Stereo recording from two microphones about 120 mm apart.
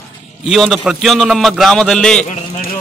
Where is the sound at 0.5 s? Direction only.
Centre (ahead or behind).